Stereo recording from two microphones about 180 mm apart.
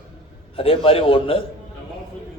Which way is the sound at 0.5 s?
30° left (ahead or behind).